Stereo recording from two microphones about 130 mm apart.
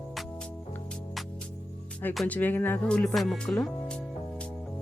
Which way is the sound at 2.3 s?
15° left (ahead or behind).